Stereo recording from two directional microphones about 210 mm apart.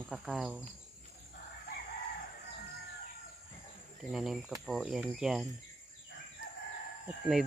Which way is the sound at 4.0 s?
Centre (ahead or behind).